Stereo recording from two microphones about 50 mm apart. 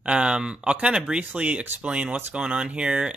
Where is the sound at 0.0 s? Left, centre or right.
Right.